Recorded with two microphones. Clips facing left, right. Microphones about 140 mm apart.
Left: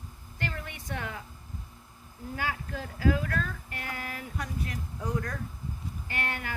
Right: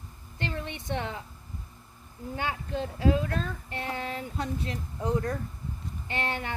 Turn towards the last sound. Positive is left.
turn(degrees=-25)  # may be behind; listen again after turning